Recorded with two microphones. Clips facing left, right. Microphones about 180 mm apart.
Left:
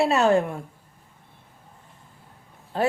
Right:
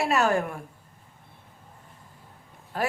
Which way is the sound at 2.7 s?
25° left (ahead or behind).